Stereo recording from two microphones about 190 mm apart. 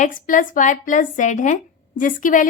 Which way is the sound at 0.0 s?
45° left (ahead or behind).